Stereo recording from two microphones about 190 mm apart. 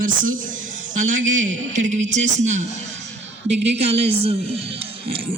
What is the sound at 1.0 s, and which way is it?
Speech, 40° right (ahead or behind).